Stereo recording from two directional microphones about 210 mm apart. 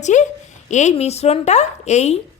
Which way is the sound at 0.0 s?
35° left (ahead or behind).